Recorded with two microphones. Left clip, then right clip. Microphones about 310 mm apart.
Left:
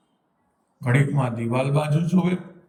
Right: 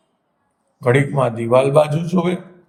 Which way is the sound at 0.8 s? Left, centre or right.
Centre.